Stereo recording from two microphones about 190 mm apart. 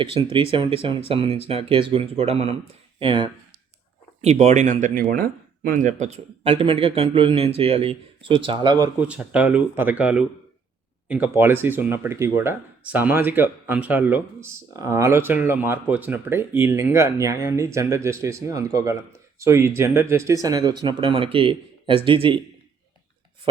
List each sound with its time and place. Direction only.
0.5 s speech: 30° right (ahead or behind)
9.0 s speech: 5° right (ahead or behind); by 22.4 s 25° right (ahead or behind)